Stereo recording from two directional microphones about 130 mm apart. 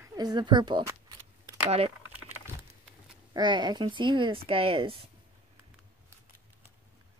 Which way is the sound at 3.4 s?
35° right (ahead or behind).